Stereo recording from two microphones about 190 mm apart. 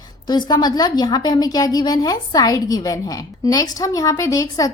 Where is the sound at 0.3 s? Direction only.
20° left (ahead or behind).